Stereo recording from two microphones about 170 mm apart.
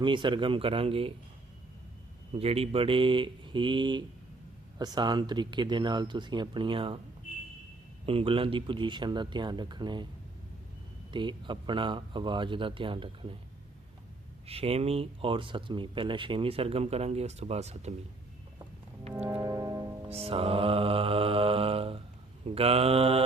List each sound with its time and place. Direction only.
0.0 s speech: 30° right (ahead or behind)
2.3 s speech: 35° right (ahead or behind)
8.0 s speech: 30° right (ahead or behind)
11.1 s speech: 30° right (ahead or behind)
14.4 s speech: 35° right (ahead or behind)
19.1 s music: 10° right (ahead or behind)
20.1 s speech: 35° right (ahead or behind)